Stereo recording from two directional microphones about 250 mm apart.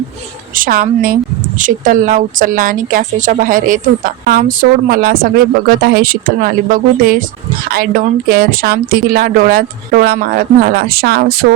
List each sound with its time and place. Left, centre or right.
0.5 s speech: right
8.3 s speech: right